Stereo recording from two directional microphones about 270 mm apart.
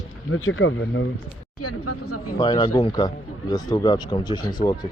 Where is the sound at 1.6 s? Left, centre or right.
Left.